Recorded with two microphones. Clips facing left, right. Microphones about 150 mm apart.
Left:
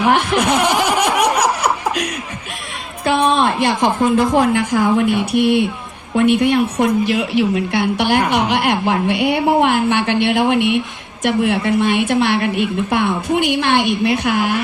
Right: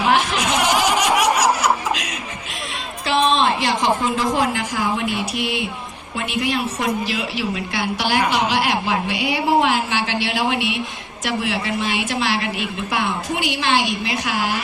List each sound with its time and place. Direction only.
0.1 s laughter: 55° left (ahead or behind)
3.1 s a woman's voice: 55° left (ahead or behind)